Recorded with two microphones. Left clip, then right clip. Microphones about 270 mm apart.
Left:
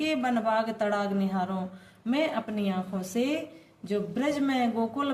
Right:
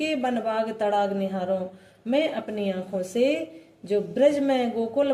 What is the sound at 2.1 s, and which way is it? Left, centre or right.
A woman's voice, left.